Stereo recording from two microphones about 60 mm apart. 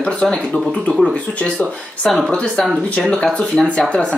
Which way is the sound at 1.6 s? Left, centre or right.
Centre.